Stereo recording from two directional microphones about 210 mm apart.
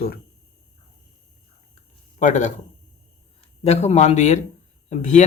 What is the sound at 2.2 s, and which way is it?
Speech, 35° left (ahead or behind).